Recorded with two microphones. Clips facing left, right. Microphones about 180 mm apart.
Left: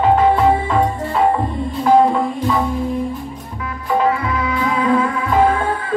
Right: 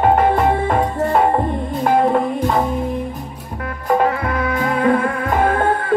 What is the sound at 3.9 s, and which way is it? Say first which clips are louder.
Music: right 1 dB; 50° right (ahead or behind).